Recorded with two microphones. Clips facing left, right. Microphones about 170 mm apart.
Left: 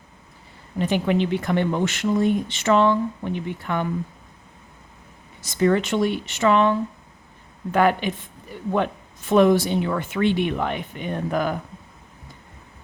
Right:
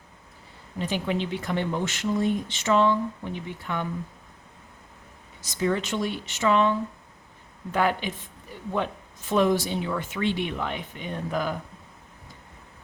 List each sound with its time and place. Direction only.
0.8 s speech: 60° left (ahead or behind)
5.4 s speech: 60° left (ahead or behind)